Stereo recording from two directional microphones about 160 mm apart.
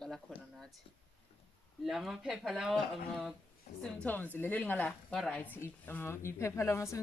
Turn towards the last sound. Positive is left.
turn(degrees=20)  # may be behind; listen again after turning